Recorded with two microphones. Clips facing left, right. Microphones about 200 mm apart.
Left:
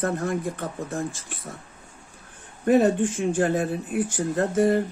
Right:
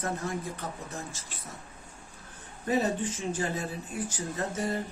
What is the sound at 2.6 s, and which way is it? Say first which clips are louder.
Speech: left 9 dB; 55° left (ahead or behind).